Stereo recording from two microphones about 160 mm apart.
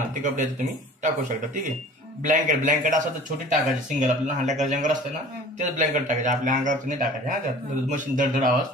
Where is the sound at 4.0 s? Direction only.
50° right (ahead or behind).